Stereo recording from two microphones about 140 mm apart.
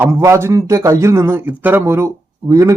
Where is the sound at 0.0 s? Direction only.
20° right (ahead or behind).